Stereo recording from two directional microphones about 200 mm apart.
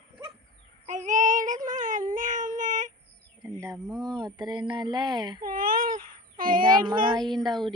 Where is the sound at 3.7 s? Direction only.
Centre (ahead or behind).